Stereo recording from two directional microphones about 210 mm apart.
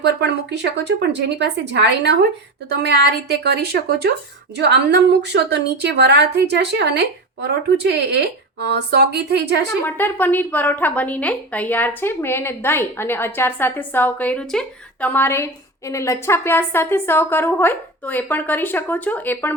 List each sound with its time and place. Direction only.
0.0 s a woman's voice: 55° right (ahead or behind)
9.8 s a woman's voice: 10° left (ahead or behind)